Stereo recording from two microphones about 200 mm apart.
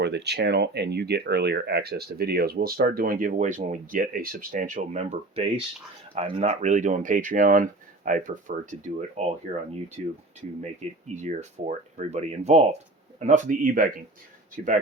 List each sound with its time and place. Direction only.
0.0 s speech: 55° right (ahead or behind); by 14.8 s 40° right (ahead or behind)